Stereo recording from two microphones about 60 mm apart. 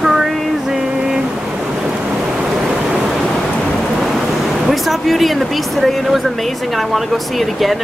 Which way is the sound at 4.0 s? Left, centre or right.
Centre.